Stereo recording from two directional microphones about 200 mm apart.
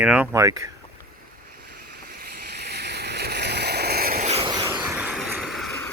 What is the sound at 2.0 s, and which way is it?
Boat, 50° right (ahead or behind).